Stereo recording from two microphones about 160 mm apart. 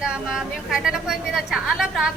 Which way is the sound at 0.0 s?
5° right (ahead or behind).